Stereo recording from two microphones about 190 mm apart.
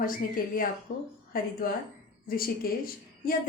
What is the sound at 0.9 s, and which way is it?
A woman's voice, 45° left (ahead or behind).